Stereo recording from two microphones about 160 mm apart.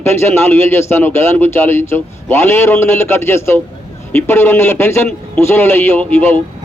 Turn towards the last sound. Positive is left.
turn(degrees=10)  # may be behind; listen again after turning